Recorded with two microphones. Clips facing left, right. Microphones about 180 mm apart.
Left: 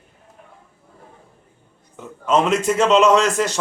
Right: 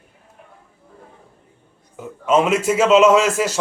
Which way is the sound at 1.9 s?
5° right (ahead or behind).